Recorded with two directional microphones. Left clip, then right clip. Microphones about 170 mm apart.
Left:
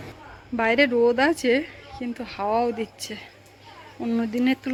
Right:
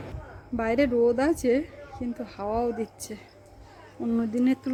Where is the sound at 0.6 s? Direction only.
5° right (ahead or behind).